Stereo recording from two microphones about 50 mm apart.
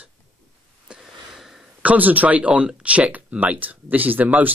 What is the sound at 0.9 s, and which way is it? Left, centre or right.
Wheeze, centre.